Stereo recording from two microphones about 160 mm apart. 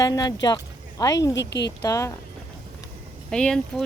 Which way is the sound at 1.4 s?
90° left.